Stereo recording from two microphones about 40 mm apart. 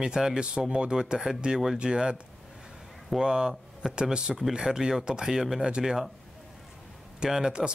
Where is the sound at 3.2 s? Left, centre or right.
Centre.